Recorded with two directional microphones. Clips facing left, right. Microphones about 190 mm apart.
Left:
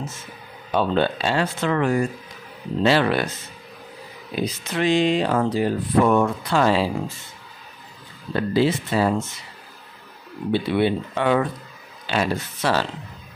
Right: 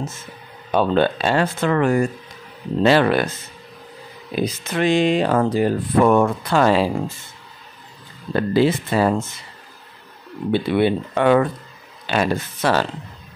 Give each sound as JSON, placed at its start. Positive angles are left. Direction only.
{"t": 0.7, "sound": "speech", "side_deg": -50}
{"t": 4.4, "sound": "speech", "side_deg": -50}
{"t": 8.4, "sound": "speech", "side_deg": -55}
{"t": 10.5, "sound": "speech", "side_deg": -55}